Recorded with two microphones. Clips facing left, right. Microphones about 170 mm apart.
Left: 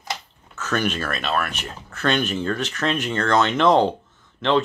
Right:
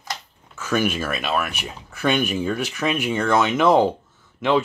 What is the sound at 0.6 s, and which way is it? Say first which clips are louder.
Speech: right 2 dB; 10° right (ahead or behind).